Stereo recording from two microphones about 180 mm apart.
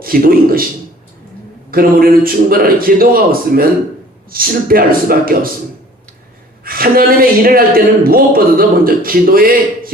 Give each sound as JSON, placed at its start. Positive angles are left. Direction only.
{"t": 0.0, "sound": "a man's voice", "side_deg": -55}
{"t": 1.7, "sound": "a man's voice", "side_deg": -55}
{"t": 6.7, "sound": "a man's voice", "side_deg": -55}